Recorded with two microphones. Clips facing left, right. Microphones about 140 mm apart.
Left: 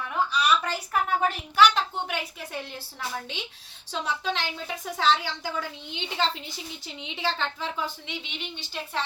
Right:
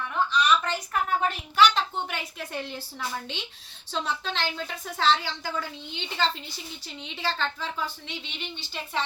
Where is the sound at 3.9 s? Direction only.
10° left (ahead or behind).